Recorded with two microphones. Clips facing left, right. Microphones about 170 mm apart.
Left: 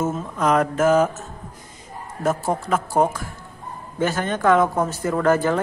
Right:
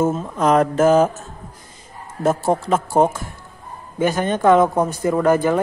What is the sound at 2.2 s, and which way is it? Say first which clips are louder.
Speech: right 4 dB; 25° right (ahead or behind).